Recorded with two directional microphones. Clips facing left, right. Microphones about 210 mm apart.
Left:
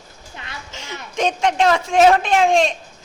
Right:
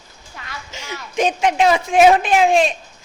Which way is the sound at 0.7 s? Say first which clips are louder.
Right 2 dB; 10° right (ahead or behind).